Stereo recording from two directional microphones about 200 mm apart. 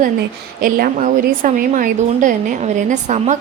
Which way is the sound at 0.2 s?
45° right (ahead or behind).